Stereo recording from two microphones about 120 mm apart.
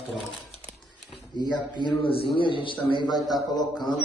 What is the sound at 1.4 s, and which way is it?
A man's voice, 40° left (ahead or behind).